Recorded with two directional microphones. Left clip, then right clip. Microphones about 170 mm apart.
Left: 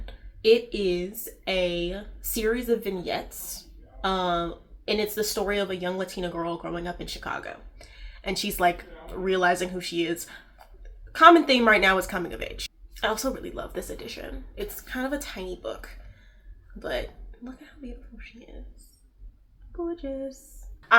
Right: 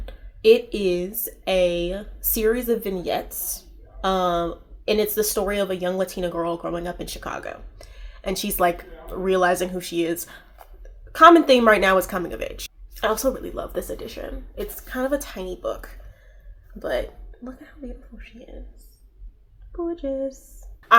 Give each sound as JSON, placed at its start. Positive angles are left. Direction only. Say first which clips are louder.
{"t": 0.0, "sound": "speech", "louder": "right 5 dB", "side_deg": -45}
{"t": 19.7, "sound": "speech", "louder": "right 5 dB", "side_deg": -40}